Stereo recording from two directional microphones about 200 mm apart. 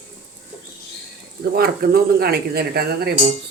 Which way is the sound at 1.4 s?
50° right (ahead or behind).